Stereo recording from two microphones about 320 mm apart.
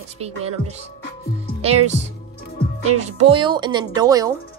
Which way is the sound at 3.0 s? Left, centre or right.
Centre.